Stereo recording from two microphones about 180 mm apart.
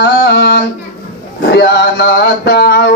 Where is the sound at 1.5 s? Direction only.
65° left (ahead or behind).